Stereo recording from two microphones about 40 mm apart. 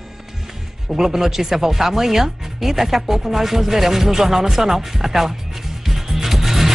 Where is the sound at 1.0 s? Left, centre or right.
Centre.